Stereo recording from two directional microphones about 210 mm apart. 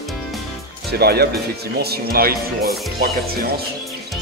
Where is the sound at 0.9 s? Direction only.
50° right (ahead or behind).